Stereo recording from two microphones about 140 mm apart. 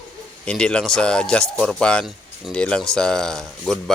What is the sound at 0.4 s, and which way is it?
Speech, 5° left (ahead or behind).